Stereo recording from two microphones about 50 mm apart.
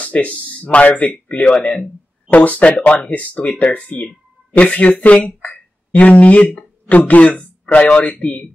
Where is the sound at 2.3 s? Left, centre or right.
Left.